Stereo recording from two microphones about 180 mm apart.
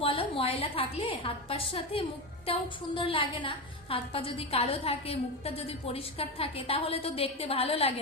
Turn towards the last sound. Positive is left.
turn(degrees=35)  # may be behind; listen again after turning